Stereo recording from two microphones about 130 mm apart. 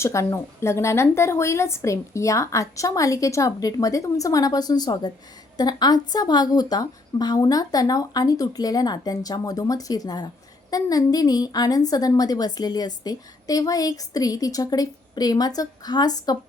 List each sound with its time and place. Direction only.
0.0 s a woman's voice: 20° left (ahead or behind)